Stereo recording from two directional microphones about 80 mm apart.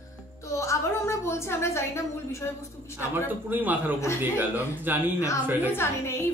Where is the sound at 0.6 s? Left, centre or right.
Left.